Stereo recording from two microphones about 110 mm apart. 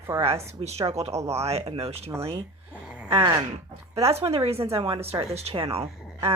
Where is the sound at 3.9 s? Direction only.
65° right (ahead or behind).